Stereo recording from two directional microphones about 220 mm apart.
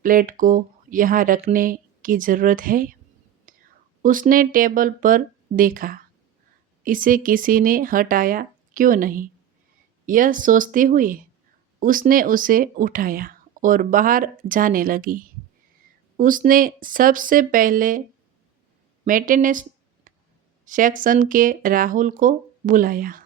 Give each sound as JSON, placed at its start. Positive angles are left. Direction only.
{"t": 0.0, "sound": "speech", "side_deg": -40}
{"t": 3.5, "sound": "whispering", "side_deg": -40}
{"t": 4.0, "sound": "speech", "side_deg": -40}
{"t": 19.0, "sound": "speech", "side_deg": -40}
{"t": 20.7, "sound": "speech", "side_deg": -35}